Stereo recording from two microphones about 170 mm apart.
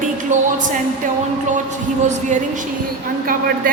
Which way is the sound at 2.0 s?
45° right (ahead or behind).